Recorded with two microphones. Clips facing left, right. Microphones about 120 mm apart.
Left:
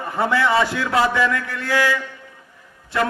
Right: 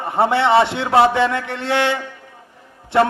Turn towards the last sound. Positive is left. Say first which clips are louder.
# right 6 dB
turn(degrees=-25)  # may be behind; listen again after turning